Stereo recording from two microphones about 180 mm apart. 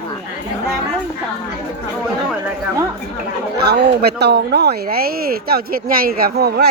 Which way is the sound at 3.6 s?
65° right (ahead or behind).